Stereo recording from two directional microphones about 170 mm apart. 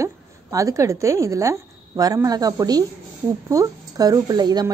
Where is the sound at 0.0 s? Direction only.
20° right (ahead or behind).